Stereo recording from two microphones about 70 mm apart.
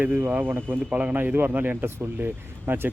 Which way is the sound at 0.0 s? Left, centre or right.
Right.